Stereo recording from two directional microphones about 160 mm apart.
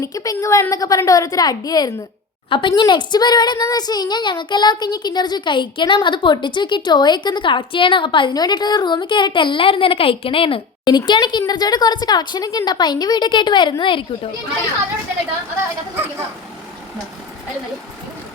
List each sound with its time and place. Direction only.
0.0 s a woman's voice: 20° left (ahead or behind)